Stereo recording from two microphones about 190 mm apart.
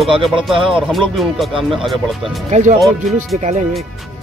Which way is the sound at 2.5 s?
40° right (ahead or behind).